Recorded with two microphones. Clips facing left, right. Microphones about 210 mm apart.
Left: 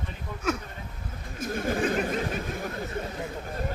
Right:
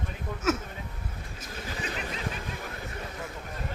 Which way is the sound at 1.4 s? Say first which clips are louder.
Left 12 dB; 50° left (ahead or behind).